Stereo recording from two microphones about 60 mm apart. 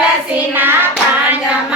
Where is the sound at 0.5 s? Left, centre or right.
Right.